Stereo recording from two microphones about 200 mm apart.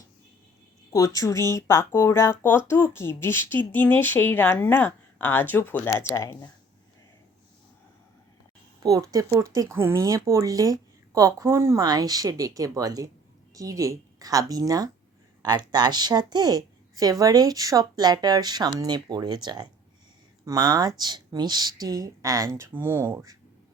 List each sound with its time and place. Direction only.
0.9 s speech: 15° left (ahead or behind)
8.8 s a woman's voice: 15° right (ahead or behind)